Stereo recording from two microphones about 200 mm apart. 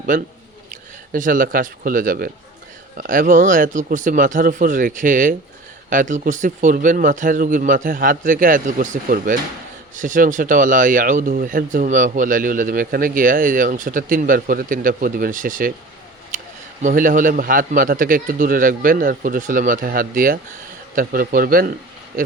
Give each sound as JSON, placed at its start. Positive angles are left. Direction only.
{"t": 0.1, "sound": "a man's voice", "side_deg": -40}
{"t": 16.8, "sound": "speech", "side_deg": -45}